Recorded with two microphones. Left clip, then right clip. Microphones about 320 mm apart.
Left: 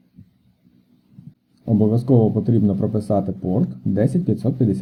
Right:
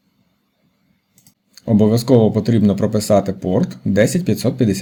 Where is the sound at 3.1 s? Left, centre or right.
Right.